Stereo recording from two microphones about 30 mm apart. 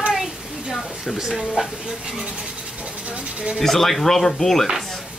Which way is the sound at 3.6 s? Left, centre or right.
Centre.